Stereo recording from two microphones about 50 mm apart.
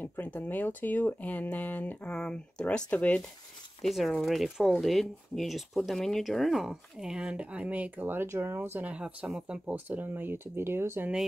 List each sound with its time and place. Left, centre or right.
0.0 s speech: left
2.1 s speech: centre
3.8 s speech: centre
6.6 s speech: centre; by 8.1 s right
8.1 s speech: right
8.5 s speech: right
8.9 s speech: right
9.8 s speech: right